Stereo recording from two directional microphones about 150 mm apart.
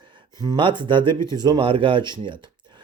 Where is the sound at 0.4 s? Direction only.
30° right (ahead or behind).